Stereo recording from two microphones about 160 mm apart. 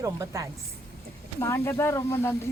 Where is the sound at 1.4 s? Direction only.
15° left (ahead or behind).